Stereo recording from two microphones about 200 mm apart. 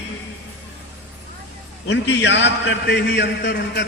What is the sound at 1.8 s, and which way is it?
A man's voice, 60° left (ahead or behind).